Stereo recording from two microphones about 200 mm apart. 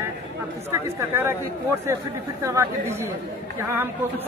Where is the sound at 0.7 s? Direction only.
15° right (ahead or behind).